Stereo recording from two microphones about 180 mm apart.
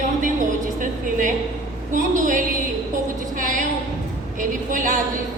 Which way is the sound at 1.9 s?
45° right (ahead or behind).